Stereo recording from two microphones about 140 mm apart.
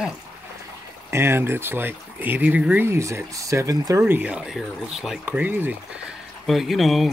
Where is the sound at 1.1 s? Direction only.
15° right (ahead or behind).